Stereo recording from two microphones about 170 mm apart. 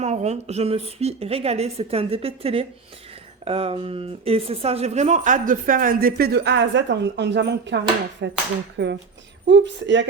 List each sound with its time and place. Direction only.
0.0 s a woman's voice: 40° right (ahead or behind); by 10.1 s 90° right